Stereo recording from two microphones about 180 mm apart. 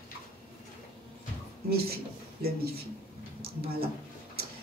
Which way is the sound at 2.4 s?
60° right (ahead or behind).